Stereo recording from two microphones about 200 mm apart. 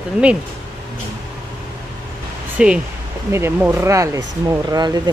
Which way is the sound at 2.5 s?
5° right (ahead or behind).